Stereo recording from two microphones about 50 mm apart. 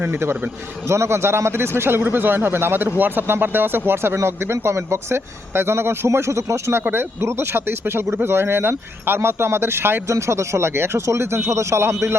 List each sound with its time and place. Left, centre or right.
0.9 s speech: right
6.1 s speech: right
10.1 s speech: right